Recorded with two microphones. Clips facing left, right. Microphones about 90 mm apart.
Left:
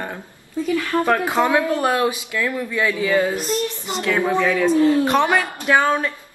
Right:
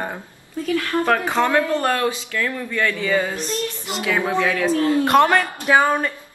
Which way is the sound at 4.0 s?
15° right (ahead or behind).